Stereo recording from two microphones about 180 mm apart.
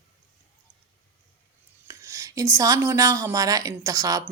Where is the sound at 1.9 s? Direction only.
15° right (ahead or behind).